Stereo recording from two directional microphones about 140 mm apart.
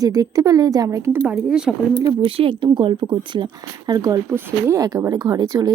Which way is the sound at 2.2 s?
40° right (ahead or behind).